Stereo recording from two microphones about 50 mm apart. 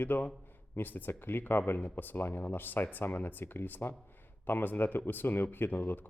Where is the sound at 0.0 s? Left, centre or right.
Left.